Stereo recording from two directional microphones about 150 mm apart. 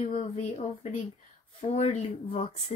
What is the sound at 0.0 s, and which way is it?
Speech, 50° left (ahead or behind).